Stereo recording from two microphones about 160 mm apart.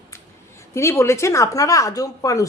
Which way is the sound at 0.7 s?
15° left (ahead or behind).